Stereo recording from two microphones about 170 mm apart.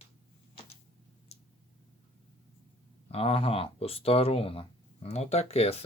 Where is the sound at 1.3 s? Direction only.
40° left (ahead or behind).